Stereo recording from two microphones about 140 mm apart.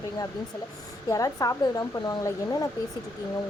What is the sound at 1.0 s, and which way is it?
Speech, 25° left (ahead or behind).